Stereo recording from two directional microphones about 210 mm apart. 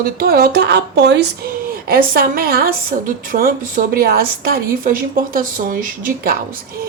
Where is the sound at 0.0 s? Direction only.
45° right (ahead or behind).